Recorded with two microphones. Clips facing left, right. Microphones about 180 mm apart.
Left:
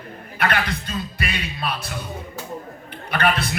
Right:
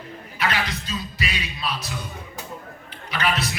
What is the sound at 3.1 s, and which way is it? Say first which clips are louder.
Speech: left 3 dB; 55° left (ahead or behind).